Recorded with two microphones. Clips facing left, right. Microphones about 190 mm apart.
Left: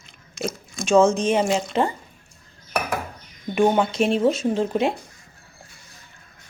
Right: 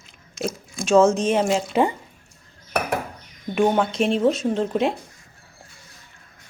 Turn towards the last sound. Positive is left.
turn(degrees=0)  # may be behind; listen again after turning